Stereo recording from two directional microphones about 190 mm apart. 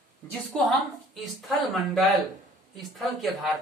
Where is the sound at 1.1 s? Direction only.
Centre (ahead or behind).